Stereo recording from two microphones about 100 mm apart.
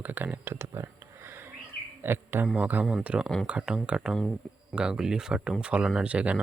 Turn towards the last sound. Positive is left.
turn(degrees=-10)  # may be behind; listen again after turning